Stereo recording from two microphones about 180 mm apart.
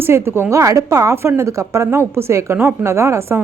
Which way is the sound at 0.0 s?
15° right (ahead or behind).